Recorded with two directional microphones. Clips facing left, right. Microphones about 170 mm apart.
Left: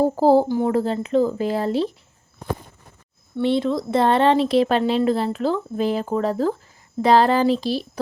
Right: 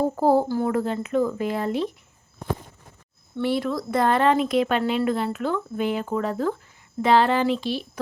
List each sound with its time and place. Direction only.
0.0 s speech: 30° left (ahead or behind)
0.4 s speech: 20° left (ahead or behind)
0.7 s speech: 30° left (ahead or behind)
3.4 s speech: 25° left (ahead or behind)